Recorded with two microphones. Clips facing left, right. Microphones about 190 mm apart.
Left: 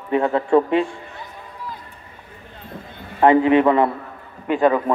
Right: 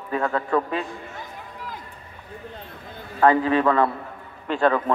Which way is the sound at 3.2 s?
20° left (ahead or behind).